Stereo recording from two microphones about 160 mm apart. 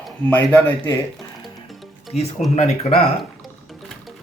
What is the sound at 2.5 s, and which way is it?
Speech, 40° left (ahead or behind).